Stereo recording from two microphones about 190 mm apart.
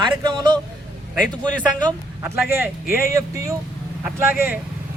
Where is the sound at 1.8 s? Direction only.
10° right (ahead or behind).